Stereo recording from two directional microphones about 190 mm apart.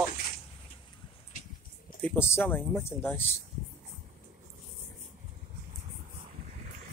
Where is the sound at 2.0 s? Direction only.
10° left (ahead or behind).